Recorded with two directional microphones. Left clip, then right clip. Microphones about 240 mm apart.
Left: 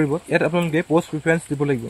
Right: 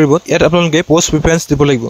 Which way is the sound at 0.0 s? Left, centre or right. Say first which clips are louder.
Right 10 dB; right.